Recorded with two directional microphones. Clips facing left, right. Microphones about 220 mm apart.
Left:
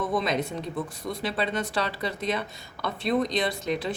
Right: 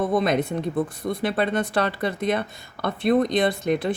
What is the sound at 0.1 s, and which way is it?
Speech, 55° right (ahead or behind).